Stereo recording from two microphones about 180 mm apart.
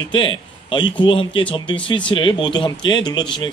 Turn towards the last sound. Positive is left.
turn(degrees=25)  # may be behind; listen again after turning